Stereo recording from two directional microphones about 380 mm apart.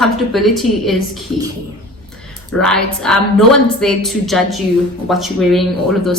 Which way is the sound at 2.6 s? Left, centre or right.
Centre.